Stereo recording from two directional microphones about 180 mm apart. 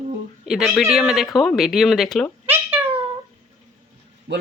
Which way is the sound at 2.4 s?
10° right (ahead or behind).